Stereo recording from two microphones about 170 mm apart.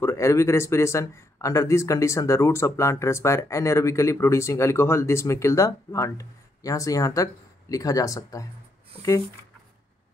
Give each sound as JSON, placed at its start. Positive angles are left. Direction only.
{"t": 0.0, "sound": "speech", "side_deg": 15}